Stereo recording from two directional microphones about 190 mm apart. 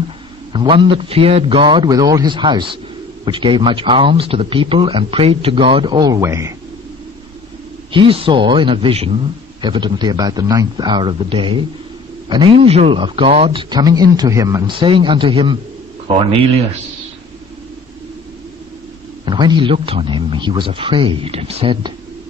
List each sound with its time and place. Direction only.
0.5 s speech: 25° right (ahead or behind)
7.9 s speech: 25° right (ahead or behind)
19.2 s speech: 25° right (ahead or behind)